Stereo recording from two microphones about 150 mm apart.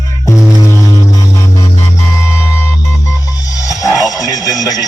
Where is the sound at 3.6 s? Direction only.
20° left (ahead or behind).